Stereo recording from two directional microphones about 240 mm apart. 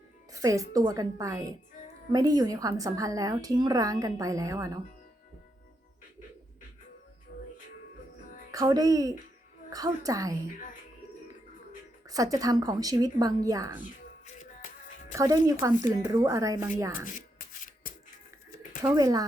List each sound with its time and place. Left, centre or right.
0.3 s a woman's voice: centre
8.5 s a woman's voice: centre
12.0 s a woman's voice: centre
15.1 s a woman's voice: centre
17.8 s music: left
18.8 s a woman's voice: centre